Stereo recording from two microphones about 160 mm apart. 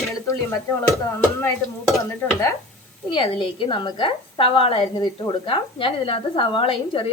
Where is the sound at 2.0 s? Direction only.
20° left (ahead or behind).